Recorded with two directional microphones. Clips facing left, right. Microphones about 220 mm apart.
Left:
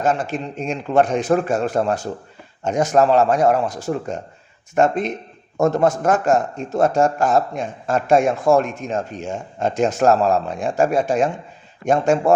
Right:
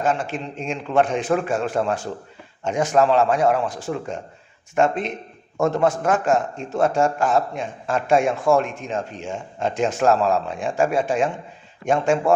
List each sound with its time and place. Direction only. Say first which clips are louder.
0.0 s a man's voice: left 2 dB; 40° left (ahead or behind)